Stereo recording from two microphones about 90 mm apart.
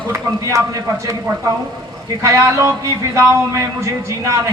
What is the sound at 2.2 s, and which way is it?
A man's voice, 35° right (ahead or behind).